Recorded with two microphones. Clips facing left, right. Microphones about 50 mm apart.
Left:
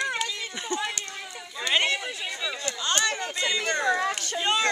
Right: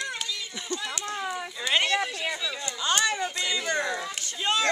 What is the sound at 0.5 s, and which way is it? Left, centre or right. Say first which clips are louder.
Speech: left 3 dB; left.